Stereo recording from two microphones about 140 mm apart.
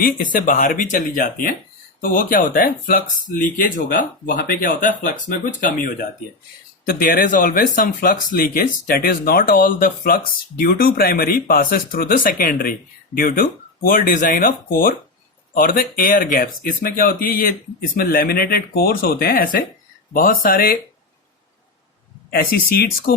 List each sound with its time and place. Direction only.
0.0 s speech: 75° left (ahead or behind)
22.3 s speech: 90° left